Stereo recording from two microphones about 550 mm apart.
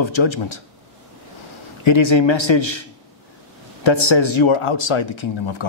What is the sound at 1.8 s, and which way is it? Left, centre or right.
Speech, left.